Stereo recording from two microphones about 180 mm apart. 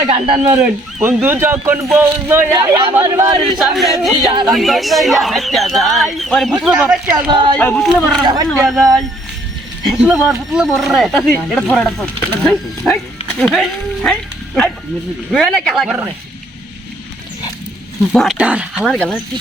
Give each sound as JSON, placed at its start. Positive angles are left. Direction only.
{"t": 0.4, "sound": "speech", "side_deg": -10}
{"t": 3.6, "sound": "speech", "side_deg": 0}
{"t": 7.3, "sound": "speech", "side_deg": -25}
{"t": 7.6, "sound": "speech", "side_deg": 5}
{"t": 8.2, "sound": "speech", "side_deg": -25}
{"t": 8.4, "sound": "speech", "side_deg": 0}
{"t": 18.1, "sound": "speech", "side_deg": 0}